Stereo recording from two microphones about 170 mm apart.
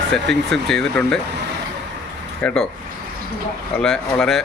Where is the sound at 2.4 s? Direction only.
5° left (ahead or behind).